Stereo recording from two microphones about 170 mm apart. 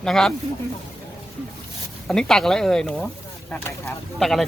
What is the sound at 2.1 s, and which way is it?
Speech, 5° left (ahead or behind).